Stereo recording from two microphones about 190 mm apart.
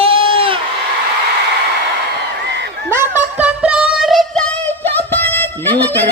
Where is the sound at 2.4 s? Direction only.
65° right (ahead or behind).